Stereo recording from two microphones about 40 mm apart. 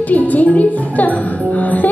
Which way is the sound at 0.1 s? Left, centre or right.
Left.